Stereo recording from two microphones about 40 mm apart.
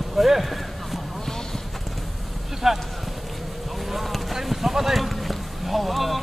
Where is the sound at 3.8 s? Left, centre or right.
Centre.